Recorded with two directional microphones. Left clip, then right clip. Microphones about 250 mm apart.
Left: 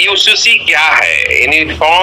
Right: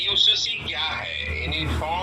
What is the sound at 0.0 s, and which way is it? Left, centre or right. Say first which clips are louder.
Speech: left 11 dB; left.